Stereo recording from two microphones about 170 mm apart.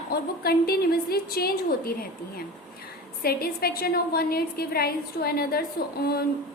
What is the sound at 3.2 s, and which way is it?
A woman's voice, 65° left (ahead or behind).